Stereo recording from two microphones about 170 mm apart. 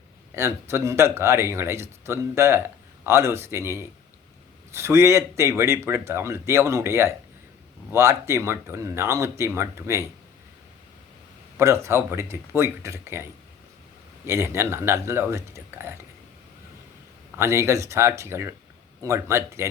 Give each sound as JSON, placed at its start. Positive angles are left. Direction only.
{"t": 0.3, "sound": "speech", "side_deg": -15}
{"t": 11.5, "sound": "speech", "side_deg": -15}
{"t": 14.3, "sound": "speech", "side_deg": -15}
{"t": 17.3, "sound": "speech", "side_deg": -15}